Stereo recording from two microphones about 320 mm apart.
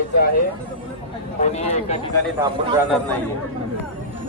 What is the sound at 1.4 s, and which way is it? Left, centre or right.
Speech, left.